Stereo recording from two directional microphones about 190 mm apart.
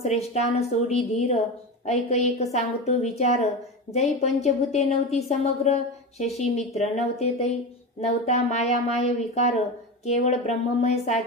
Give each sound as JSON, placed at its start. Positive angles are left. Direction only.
{"t": 0.0, "sound": "a woman's voice", "side_deg": 35}